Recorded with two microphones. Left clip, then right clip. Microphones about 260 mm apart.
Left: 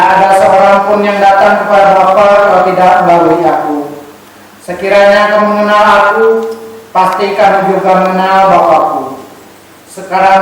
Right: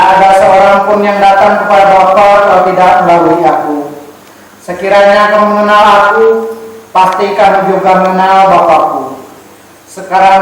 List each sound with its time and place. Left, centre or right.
0.0 s mantra: centre
1.0 s a sound: centre
4.7 s speech: centre
5.0 s speech: centre
7.2 s speech: centre
10.2 s speech: centre